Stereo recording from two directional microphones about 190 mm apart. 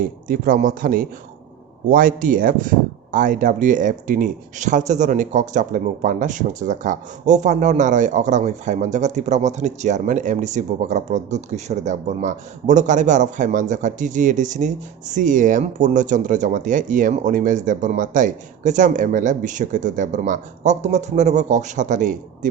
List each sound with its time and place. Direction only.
0.0 s speech: 45° right (ahead or behind)